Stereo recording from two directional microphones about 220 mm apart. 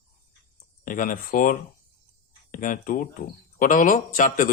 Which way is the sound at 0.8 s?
40° left (ahead or behind).